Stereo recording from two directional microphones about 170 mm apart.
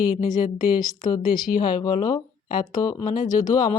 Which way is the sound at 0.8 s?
25° left (ahead or behind).